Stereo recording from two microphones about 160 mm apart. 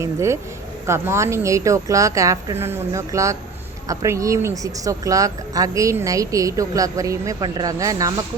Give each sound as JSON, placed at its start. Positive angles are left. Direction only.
{"t": 0.0, "sound": "speech", "side_deg": -15}